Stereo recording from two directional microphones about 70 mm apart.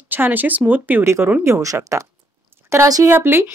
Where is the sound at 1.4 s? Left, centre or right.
Right.